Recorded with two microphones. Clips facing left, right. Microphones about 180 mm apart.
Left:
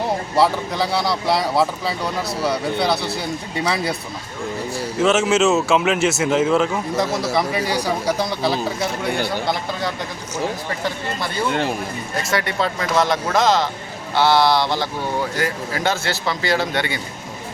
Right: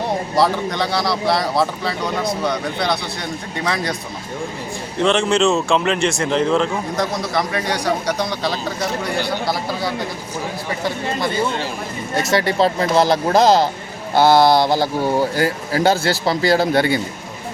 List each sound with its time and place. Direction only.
0.3 s speech: 5° left (ahead or behind)
4.9 s speech: 5° left (ahead or behind)
12.3 s speech: 30° right (ahead or behind)